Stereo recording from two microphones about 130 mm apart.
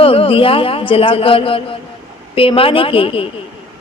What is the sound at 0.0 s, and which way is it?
A man's voice, 45° left (ahead or behind).